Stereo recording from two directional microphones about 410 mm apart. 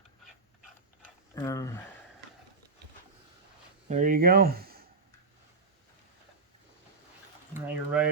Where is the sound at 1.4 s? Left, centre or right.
Centre.